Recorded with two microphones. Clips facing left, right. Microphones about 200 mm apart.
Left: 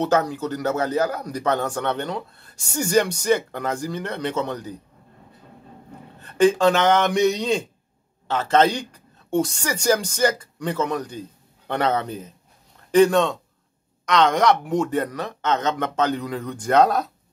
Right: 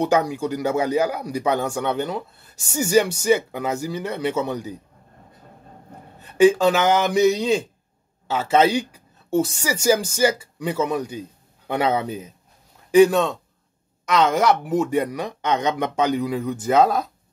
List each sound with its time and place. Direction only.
0.0 s a man's voice: 10° right (ahead or behind)
6.2 s a woman's voice: 10° right (ahead or behind)